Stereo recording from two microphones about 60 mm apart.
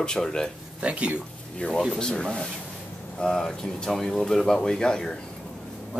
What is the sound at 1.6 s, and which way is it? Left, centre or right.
Speech, left.